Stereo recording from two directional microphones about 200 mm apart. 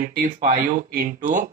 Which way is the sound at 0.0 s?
45° right (ahead or behind).